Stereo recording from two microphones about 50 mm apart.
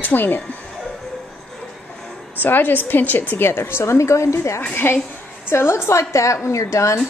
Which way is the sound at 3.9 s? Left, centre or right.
Left.